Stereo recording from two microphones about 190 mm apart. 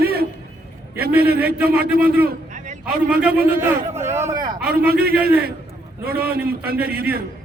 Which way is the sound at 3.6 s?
15° right (ahead or behind).